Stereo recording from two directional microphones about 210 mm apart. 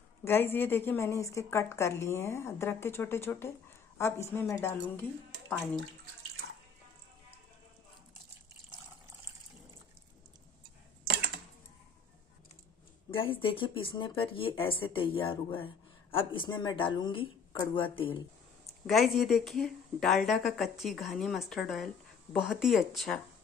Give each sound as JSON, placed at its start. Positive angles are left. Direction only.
{"t": 0.2, "sound": "a woman's voice", "side_deg": 10}
{"t": 13.1, "sound": "speech", "side_deg": 25}
{"t": 18.9, "sound": "speech", "side_deg": 0}